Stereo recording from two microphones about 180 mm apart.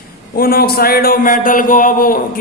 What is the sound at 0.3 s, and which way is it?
Speech, 55° left (ahead or behind).